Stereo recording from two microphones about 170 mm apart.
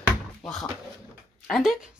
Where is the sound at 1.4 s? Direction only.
Centre (ahead or behind).